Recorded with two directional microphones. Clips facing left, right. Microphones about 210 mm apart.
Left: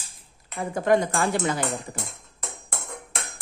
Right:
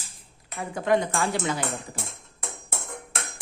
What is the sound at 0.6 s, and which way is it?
Speech, 45° left (ahead or behind).